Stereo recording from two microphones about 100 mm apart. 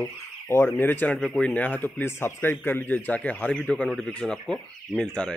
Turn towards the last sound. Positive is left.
turn(degrees=10)  # may be behind; listen again after turning